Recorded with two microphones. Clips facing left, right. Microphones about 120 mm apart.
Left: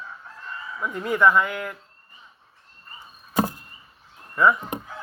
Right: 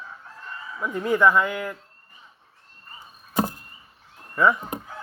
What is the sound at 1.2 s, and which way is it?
Speech, 5° right (ahead or behind).